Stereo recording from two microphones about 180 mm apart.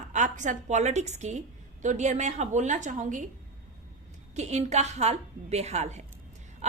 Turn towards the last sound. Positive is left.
turn(degrees=-40)  # may be behind; listen again after turning